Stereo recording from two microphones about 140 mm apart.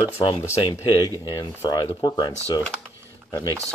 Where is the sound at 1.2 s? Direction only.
30° left (ahead or behind).